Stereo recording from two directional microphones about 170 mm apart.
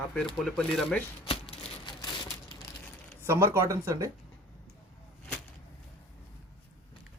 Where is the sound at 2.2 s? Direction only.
30° left (ahead or behind).